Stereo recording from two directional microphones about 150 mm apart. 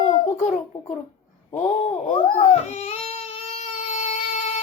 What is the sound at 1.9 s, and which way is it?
Baby cry, 50° left (ahead or behind).